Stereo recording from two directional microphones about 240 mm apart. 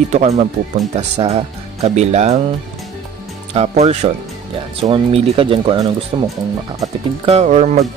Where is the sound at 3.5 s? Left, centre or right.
Right.